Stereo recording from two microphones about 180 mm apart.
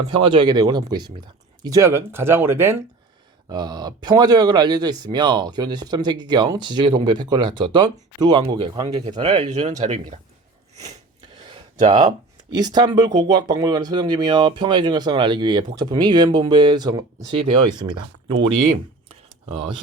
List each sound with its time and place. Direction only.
0.1 s speech: 30° right (ahead or behind)
9.2 s speech: 40° right (ahead or behind)
11.4 s speech: 25° right (ahead or behind)